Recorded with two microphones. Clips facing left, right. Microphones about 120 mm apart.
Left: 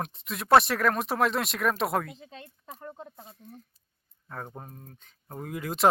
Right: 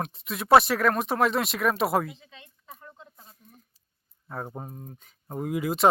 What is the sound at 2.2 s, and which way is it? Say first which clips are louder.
Speech: left 6 dB; 45° left (ahead or behind).